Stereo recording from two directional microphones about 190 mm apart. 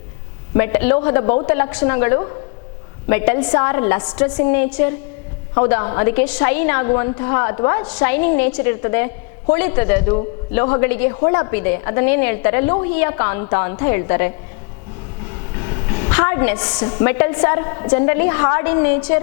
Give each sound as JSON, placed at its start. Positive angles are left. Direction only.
{"t": 0.5, "sound": "a woman's voice", "side_deg": 15}
{"t": 11.2, "sound": "a woman's voice", "side_deg": 25}
{"t": 16.0, "sound": "a woman's voice", "side_deg": 15}
{"t": 16.6, "sound": "a woman's voice", "side_deg": 25}